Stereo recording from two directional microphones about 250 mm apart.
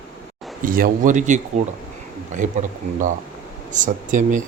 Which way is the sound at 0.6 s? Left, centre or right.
Right.